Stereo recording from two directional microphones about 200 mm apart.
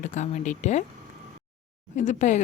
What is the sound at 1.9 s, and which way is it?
Speech, 40° left (ahead or behind).